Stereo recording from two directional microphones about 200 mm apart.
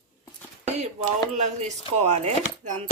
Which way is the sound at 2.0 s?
35° right (ahead or behind).